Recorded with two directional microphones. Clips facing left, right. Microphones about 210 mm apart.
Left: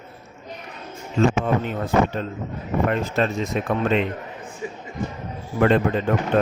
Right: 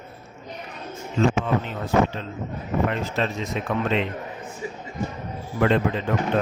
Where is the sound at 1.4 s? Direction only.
50° left (ahead or behind).